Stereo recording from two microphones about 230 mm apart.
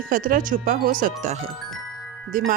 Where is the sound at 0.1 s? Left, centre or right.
Right.